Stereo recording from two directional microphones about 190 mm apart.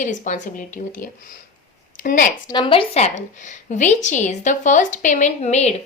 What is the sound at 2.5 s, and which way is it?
A woman's voice, 25° left (ahead or behind).